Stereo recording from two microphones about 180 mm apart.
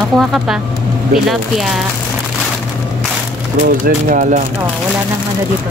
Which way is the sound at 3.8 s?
45° right (ahead or behind).